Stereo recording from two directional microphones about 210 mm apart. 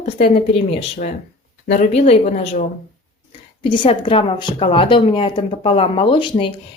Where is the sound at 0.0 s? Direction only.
30° left (ahead or behind).